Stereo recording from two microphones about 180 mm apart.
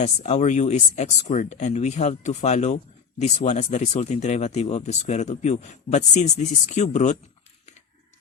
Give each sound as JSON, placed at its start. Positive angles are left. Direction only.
{"t": 0.0, "sound": "speech", "side_deg": 40}